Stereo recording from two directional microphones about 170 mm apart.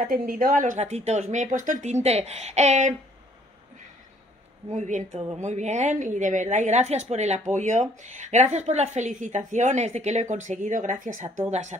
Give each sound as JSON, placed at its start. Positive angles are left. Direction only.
{"t": 0.1, "sound": "a woman's voice", "side_deg": -55}
{"t": 4.7, "sound": "a woman's voice", "side_deg": -45}
{"t": 11.2, "sound": "speech", "side_deg": -15}